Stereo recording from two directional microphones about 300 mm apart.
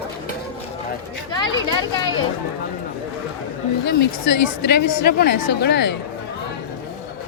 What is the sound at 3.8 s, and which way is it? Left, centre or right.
A woman's voice, left.